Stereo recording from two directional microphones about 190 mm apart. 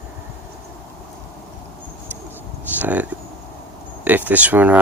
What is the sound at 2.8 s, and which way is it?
Speech, 10° right (ahead or behind).